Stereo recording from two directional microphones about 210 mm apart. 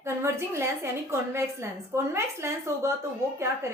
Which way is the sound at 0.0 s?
10° right (ahead or behind).